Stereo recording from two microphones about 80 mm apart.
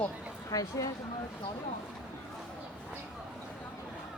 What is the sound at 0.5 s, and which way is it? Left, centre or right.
Speech, left.